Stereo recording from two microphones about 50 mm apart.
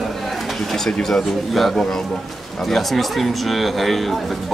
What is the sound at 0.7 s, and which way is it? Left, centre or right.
Speech, centre.